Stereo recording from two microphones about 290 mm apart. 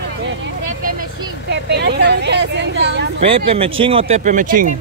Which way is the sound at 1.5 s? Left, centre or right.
Right.